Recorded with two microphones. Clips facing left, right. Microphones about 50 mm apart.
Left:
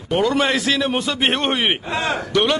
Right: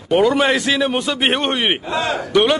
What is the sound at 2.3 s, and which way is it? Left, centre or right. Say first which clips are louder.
Speech: right 4 dB; centre.